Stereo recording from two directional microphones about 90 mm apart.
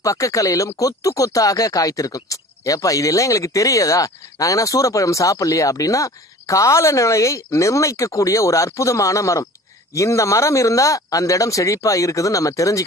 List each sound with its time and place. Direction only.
0.0 s speech: 40° left (ahead or behind)